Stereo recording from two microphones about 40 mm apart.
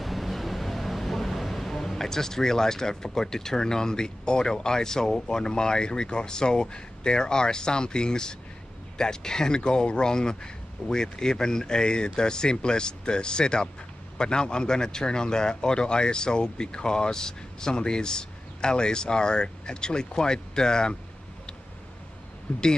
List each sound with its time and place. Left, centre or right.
0.0 s a man's voice: centre
22.5 s speech: left